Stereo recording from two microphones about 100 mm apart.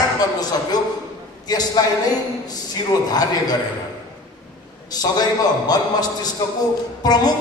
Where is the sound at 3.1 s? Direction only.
40° left (ahead or behind).